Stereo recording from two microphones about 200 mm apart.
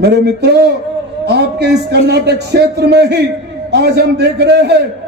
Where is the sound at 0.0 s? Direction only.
55° right (ahead or behind).